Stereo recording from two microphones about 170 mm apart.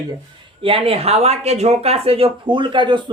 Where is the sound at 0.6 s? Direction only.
35° right (ahead or behind).